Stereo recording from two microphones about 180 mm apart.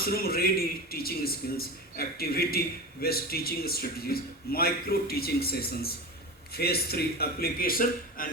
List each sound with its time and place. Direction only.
0.0 s a man's voice: 55° left (ahead or behind)